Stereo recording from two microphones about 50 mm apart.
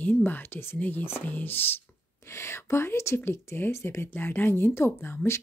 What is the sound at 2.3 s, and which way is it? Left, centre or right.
Speech, left.